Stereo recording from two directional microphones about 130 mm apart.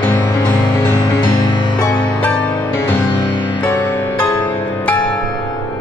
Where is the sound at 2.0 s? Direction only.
10° left (ahead or behind).